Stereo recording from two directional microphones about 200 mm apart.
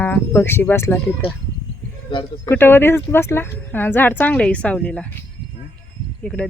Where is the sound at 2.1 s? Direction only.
25° left (ahead or behind).